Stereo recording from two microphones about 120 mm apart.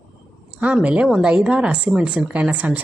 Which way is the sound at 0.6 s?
10° right (ahead or behind).